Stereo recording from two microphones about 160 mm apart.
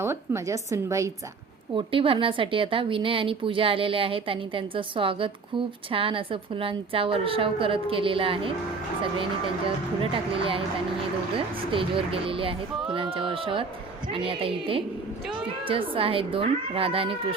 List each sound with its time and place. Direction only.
0.0 s a woman's voice: 15° right (ahead or behind)
1.7 s speech: 35° right (ahead or behind)
9.6 s speech: 35° right (ahead or behind)